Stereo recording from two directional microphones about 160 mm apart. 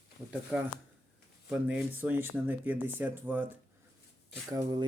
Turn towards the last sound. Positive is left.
turn(degrees=-25)  # may be behind; listen again after turning